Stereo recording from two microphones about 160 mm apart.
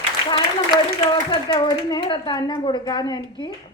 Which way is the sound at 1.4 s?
30° left (ahead or behind).